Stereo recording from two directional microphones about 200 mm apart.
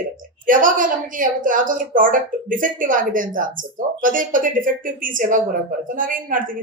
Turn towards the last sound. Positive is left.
turn(degrees=-45)  # may be behind; listen again after turning